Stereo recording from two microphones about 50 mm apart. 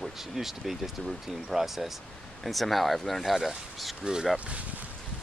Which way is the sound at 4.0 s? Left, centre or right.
Centre.